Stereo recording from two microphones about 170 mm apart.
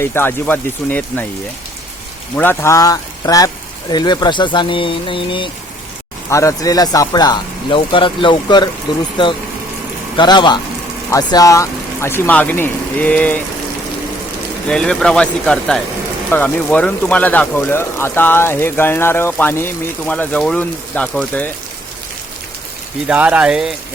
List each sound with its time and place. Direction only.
0.0 s speech: 15° left (ahead or behind)
2.3 s speech: 10° left (ahead or behind); by 5.5 s 30° left (ahead or behind)
6.3 s speech: 20° left (ahead or behind)
10.2 s speech: 25° left (ahead or behind); by 13.4 s 10° left (ahead or behind)
14.7 s speech: 5° left (ahead or behind)
23.0 s speech: 5° right (ahead or behind)